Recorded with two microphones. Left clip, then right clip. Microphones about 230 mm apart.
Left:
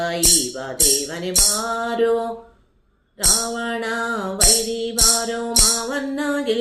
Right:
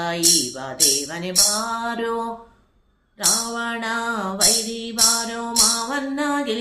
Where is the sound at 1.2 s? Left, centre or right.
Centre.